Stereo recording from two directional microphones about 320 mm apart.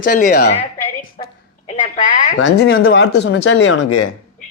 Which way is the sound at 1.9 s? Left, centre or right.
Left.